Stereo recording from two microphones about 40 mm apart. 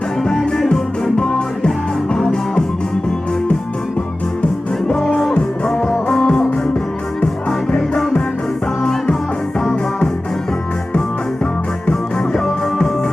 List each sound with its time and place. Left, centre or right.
0.2 s music: centre
4.9 s music: centre
5.3 s music: left
7.8 s music: centre
11.9 s music: centre